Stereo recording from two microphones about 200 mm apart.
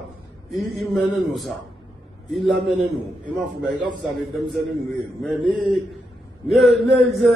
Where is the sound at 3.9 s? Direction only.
20° right (ahead or behind).